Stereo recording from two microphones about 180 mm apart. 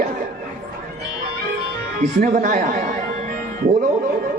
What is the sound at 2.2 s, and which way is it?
Speech, 50° right (ahead or behind).